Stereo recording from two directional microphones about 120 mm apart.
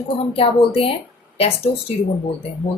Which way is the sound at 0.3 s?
50° left (ahead or behind).